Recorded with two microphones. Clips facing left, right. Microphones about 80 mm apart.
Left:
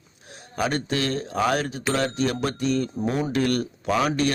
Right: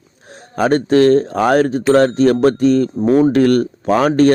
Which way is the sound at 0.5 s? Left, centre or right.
Right.